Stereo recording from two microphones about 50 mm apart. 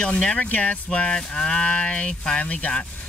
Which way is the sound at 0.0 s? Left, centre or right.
Left.